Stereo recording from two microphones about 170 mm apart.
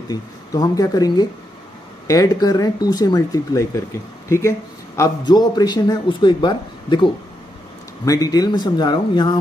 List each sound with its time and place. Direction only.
0.1 s a man's voice: 20° left (ahead or behind)